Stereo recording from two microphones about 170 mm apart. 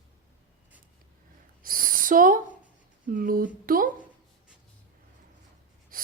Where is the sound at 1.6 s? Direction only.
55° right (ahead or behind).